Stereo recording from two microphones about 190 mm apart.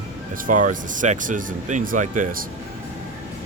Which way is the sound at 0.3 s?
45° right (ahead or behind).